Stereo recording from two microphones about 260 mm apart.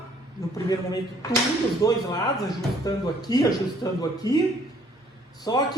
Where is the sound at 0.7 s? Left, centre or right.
Centre.